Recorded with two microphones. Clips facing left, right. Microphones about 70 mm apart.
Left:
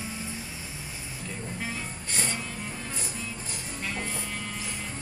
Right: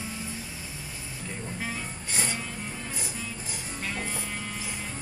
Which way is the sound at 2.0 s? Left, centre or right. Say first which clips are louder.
Right 1 dB; centre.